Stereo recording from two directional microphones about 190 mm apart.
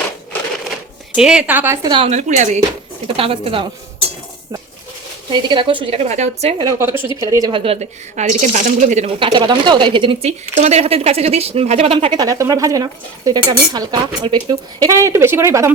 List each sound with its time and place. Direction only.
1.1 s a woman's voice: 5° right (ahead or behind); by 2.6 s 40° right (ahead or behind)
3.2 s a woman's voice: 30° right (ahead or behind)
5.3 s a woman's voice: 25° right (ahead or behind)
6.6 s a woman's voice: 15° right (ahead or behind)